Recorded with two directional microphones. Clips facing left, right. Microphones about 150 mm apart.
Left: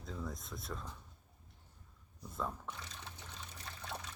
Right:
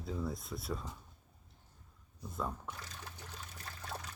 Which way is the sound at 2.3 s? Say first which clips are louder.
Right 1 dB; 5° right (ahead or behind).